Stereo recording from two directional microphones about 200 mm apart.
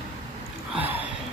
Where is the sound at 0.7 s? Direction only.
10° right (ahead or behind).